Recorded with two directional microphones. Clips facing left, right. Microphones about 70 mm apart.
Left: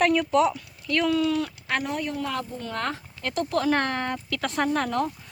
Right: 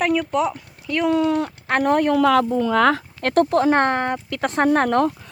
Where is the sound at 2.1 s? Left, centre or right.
Right.